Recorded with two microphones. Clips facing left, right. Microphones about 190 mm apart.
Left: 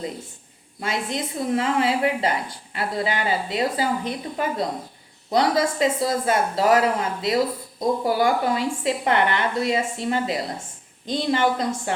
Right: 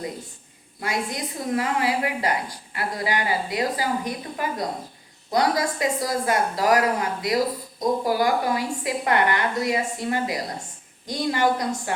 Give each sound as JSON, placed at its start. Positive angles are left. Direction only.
{"t": 0.8, "sound": "speech", "side_deg": 25}